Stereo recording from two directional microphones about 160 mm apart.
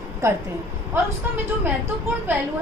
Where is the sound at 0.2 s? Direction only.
20° right (ahead or behind).